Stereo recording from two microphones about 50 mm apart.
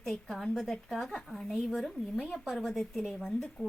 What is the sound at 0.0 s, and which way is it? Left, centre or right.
Speech, centre.